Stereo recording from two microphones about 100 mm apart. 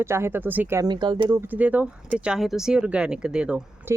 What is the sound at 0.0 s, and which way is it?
Speech, 25° right (ahead or behind).